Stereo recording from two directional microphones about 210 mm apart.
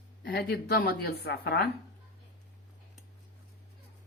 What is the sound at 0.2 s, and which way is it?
Speech, 50° left (ahead or behind).